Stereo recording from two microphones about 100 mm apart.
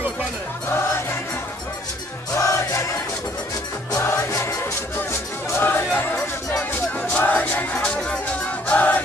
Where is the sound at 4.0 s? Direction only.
25° left (ahead or behind).